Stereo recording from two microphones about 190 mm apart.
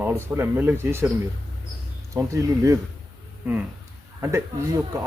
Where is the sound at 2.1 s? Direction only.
15° right (ahead or behind).